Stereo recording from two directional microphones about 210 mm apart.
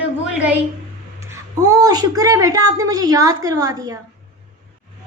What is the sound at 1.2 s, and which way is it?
A woman's voice, 15° right (ahead or behind).